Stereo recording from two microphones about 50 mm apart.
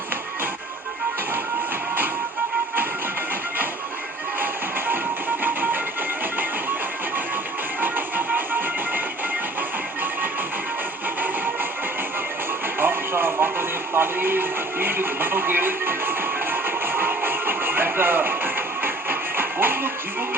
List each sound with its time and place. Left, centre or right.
5.4 s music: right
7.8 s music: right
12.8 s music: right